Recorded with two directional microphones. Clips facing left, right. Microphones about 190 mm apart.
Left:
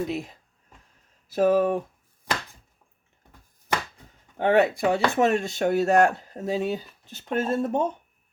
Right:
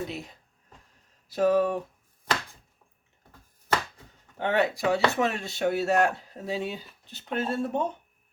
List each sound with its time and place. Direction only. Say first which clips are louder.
0.1 s speech: left 7 dB; 50° left (ahead or behind)
4.4 s speech: left 5 dB; 50° left (ahead or behind)